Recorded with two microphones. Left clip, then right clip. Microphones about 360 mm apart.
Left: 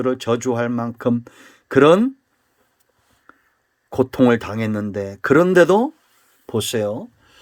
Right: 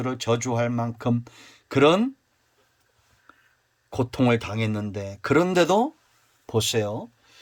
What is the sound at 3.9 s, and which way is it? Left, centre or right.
Speech, centre.